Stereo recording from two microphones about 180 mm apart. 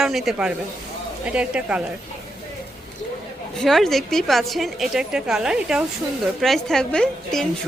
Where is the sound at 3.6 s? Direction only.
Centre (ahead or behind).